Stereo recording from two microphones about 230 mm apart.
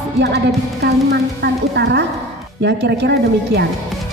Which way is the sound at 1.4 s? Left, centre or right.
Right.